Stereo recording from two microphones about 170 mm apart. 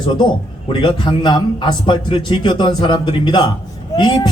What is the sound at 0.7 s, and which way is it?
A man's voice, 25° left (ahead or behind).